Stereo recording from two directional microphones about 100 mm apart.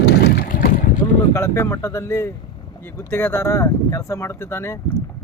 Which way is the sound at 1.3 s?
25° left (ahead or behind).